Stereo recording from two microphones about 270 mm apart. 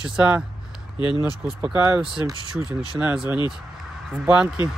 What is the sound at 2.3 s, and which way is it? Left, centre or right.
Speech, centre.